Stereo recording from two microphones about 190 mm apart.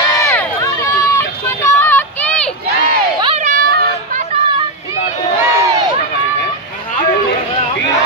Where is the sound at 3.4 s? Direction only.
45° right (ahead or behind).